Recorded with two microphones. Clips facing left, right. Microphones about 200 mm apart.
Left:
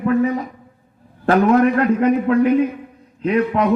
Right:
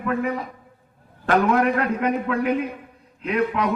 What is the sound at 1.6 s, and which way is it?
A man's voice, 35° left (ahead or behind).